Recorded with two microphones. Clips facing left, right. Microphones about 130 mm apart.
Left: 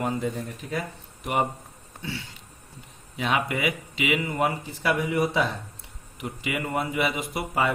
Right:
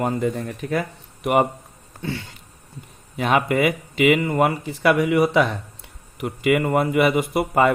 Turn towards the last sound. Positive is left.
turn(degrees=-55)  # may be behind; listen again after turning